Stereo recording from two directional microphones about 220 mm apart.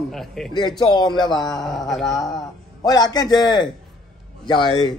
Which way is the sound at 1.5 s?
Centre (ahead or behind).